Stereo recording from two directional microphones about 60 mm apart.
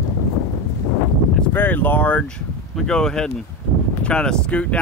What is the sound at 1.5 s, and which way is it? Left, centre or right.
Speech, left.